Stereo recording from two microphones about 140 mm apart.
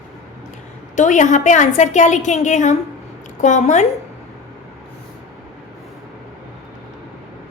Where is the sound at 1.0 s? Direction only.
60° left (ahead or behind).